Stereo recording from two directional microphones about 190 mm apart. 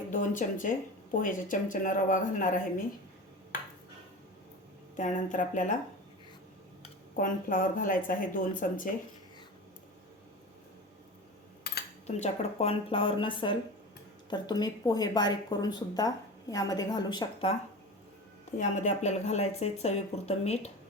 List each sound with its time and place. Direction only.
0.1 s speech: 45° left (ahead or behind)
4.9 s speech: 40° left (ahead or behind)
7.2 s speech: 45° left (ahead or behind)
12.0 s speech: 35° left (ahead or behind)
18.6 s speech: 40° left (ahead or behind)